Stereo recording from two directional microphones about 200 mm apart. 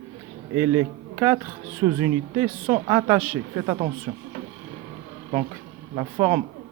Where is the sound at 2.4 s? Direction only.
10° right (ahead or behind).